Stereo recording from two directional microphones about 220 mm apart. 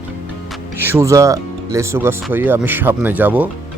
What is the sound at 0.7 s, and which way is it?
Speech, 10° right (ahead or behind).